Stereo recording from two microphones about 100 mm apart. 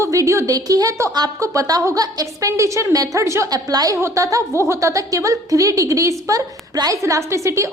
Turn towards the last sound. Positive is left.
turn(degrees=-30)  # may be behind; listen again after turning